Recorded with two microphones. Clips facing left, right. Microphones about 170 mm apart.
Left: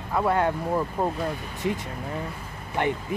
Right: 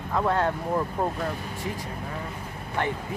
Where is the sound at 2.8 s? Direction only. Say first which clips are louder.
Left 3 dB; 15° left (ahead or behind).